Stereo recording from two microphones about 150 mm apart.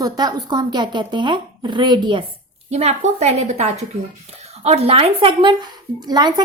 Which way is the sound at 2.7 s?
45° right (ahead or behind).